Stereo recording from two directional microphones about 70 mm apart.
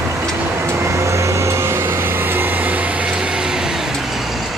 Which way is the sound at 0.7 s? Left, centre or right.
Right.